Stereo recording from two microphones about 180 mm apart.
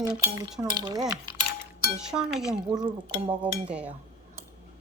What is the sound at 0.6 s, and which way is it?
Speech, 20° right (ahead or behind).